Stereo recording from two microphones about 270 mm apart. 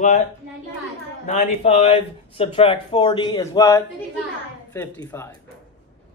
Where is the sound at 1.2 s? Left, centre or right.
Left.